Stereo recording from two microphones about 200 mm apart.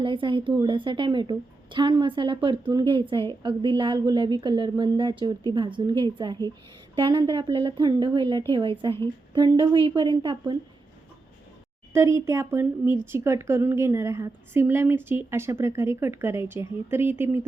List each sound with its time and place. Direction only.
0.0 s a woman's voice: 25° right (ahead or behind)
11.9 s a woman's voice: 15° right (ahead or behind)